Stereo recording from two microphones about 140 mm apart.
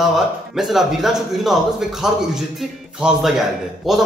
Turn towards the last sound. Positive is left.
turn(degrees=0)  # may be behind; listen again after turning